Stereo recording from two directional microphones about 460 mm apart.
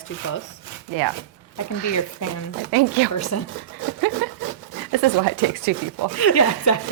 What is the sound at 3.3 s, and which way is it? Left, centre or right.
Speech, left.